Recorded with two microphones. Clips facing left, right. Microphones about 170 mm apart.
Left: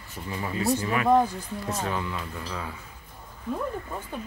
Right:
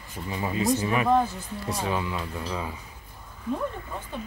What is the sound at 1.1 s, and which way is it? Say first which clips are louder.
Speech: left 3 dB; 15° left (ahead or behind).